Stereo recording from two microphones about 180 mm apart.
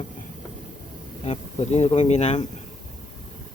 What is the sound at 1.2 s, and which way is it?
A man's voice, 35° left (ahead or behind).